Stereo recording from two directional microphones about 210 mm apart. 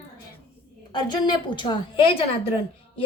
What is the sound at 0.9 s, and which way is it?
Speech, 20° left (ahead or behind).